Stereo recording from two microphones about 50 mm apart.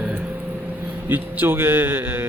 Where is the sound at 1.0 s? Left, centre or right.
Right.